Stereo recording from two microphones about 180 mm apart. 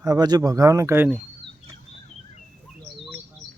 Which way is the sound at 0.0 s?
20° right (ahead or behind).